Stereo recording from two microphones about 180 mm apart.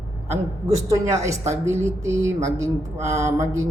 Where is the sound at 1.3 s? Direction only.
15° right (ahead or behind).